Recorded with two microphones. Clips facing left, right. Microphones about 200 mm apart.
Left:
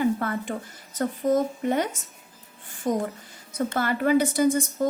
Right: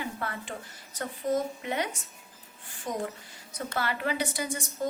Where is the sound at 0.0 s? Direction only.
45° left (ahead or behind).